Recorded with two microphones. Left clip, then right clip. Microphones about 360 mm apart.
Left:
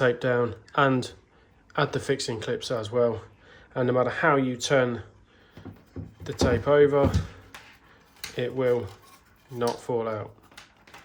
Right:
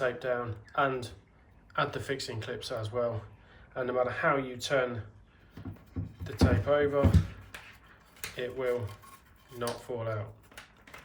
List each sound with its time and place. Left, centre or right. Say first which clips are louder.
0.0 s speech: left 8 dB; left
6.2 s speech: left 5 dB; centre
8.4 s speech: left 7 dB; centre